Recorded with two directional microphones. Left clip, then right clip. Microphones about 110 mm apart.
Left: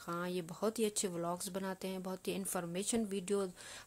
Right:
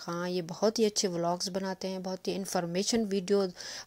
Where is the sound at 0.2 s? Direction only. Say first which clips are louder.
Right 10 dB; 30° right (ahead or behind).